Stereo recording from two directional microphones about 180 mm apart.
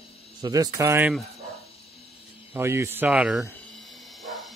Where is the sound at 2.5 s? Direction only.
15° right (ahead or behind).